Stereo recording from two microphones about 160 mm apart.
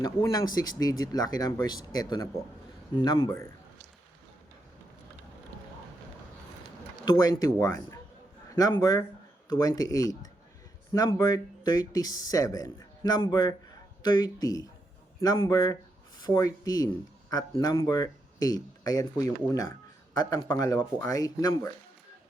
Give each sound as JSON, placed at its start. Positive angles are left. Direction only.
{"t": 0.0, "sound": "speech", "side_deg": 20}
{"t": 3.2, "sound": "a man's voice", "side_deg": 15}
{"t": 7.0, "sound": "a man's voice", "side_deg": 25}